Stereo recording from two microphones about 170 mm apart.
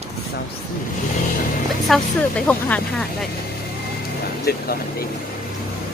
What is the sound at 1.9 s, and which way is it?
Speech, 10° left (ahead or behind).